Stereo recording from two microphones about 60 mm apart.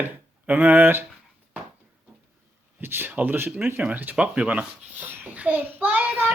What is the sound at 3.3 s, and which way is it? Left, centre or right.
Speech, right.